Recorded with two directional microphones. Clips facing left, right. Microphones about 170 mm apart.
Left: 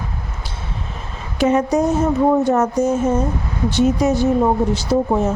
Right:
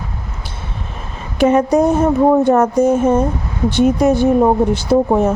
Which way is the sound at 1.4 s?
55° right (ahead or behind).